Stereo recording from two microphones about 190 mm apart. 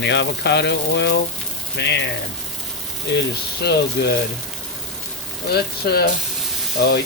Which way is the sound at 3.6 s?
60° left (ahead or behind).